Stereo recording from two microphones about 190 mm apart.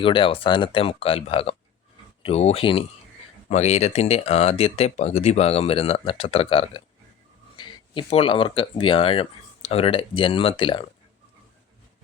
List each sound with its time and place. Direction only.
0.0 s speech: 25° left (ahead or behind)